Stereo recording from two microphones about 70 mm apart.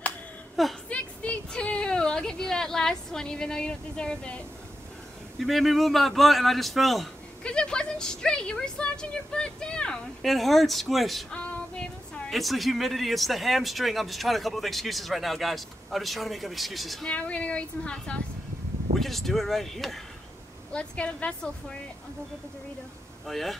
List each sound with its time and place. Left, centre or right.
0.8 s a sound: centre
5.4 s speech: centre
7.4 s speech: centre
12.3 s speech: centre
17.0 s speech: centre
18.9 s speech: centre
20.7 s speech: centre
23.2 s speech: centre